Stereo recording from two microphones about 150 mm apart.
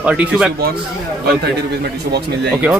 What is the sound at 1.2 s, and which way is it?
A man's voice, 90° right.